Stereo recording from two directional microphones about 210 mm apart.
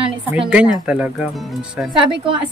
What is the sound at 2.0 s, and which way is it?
Speech, 25° right (ahead or behind).